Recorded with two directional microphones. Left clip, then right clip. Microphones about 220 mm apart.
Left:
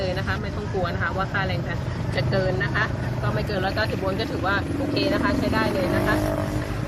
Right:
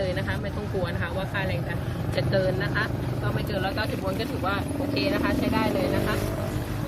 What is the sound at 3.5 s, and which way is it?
Speech, 20° left (ahead or behind).